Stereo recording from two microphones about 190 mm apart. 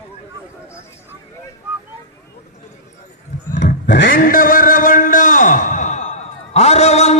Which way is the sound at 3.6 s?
65° left (ahead or behind).